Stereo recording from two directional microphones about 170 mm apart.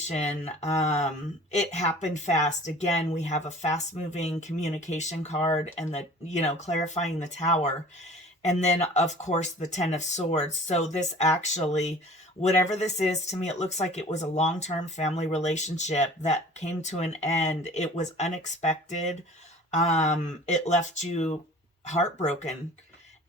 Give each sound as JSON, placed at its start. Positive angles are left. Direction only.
{"t": 0.1, "sound": "speech", "side_deg": 40}